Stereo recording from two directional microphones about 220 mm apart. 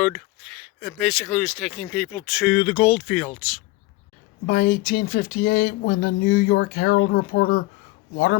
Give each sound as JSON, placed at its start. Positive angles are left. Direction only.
{"t": 0.0, "sound": "speech", "side_deg": 0}
{"t": 4.4, "sound": "speech", "side_deg": 45}